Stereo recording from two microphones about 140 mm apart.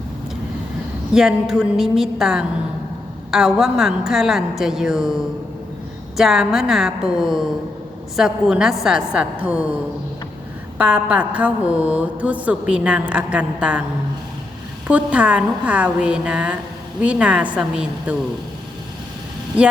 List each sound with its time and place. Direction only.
1.1 s a woman's voice: 5° right (ahead or behind)
6.1 s a woman's voice: 5° right (ahead or behind)
10.8 s mantra: 10° right (ahead or behind)
14.8 s mantra: 10° right (ahead or behind)